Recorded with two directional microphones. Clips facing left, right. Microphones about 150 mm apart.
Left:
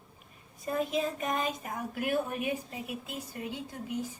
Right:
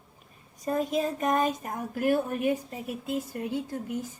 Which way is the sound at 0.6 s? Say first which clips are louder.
Right 3 dB; 40° right (ahead or behind).